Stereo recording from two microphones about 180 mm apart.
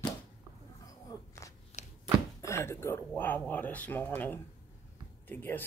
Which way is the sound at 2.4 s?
15° left (ahead or behind).